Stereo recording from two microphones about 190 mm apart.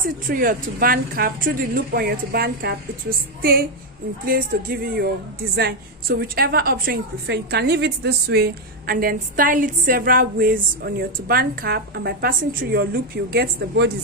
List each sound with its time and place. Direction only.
0.0 s a woman's voice: 45° right (ahead or behind)
4.3 s a woman's voice: 50° right (ahead or behind)